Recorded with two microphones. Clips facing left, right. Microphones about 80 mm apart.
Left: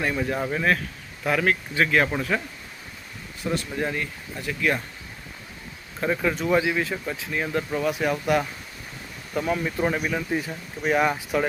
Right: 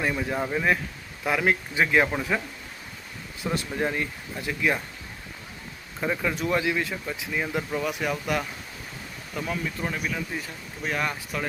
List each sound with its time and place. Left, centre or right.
0.0 s speech: centre
3.4 s speech: centre
6.0 s speech: centre
9.6 s speech: left